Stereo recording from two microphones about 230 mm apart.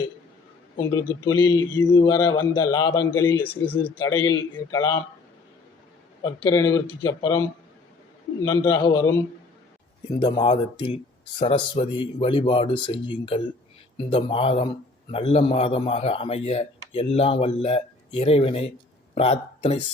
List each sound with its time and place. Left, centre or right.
0.8 s speech: centre
6.2 s speech: centre
8.4 s a man's voice: centre